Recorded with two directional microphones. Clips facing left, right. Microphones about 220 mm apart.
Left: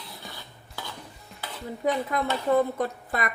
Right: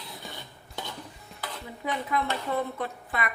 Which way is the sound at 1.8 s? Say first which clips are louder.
Left 4 dB; 40° left (ahead or behind).